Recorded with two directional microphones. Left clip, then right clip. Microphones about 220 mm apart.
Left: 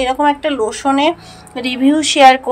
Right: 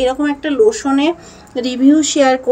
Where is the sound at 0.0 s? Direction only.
30° left (ahead or behind).